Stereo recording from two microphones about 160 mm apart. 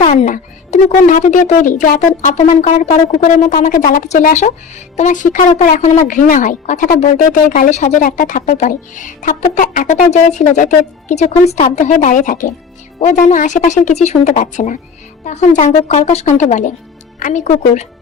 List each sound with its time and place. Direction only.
0.0 s speech: 55° left (ahead or behind)
3.5 s speech: 55° left (ahead or behind)